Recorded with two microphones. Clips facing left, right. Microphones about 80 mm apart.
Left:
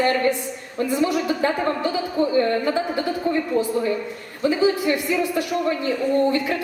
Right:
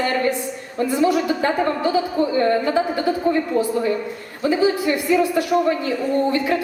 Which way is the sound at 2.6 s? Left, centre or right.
Centre.